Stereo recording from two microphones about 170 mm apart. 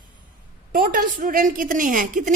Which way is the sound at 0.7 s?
55° right (ahead or behind).